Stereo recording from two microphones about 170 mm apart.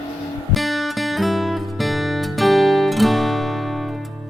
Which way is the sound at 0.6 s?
Centre (ahead or behind).